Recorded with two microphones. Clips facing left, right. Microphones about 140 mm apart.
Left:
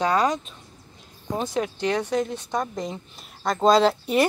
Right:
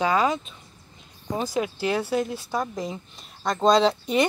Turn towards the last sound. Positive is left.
turn(degrees=5)  # may be behind; listen again after turning